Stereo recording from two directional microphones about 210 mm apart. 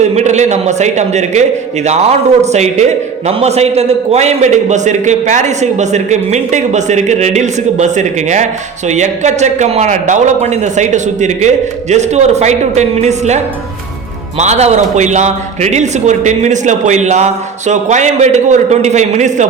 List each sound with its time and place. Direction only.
0.0 s a man's voice: 35° right (ahead or behind)